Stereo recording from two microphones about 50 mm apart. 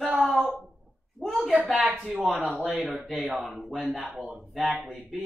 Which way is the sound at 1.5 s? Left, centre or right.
Centre.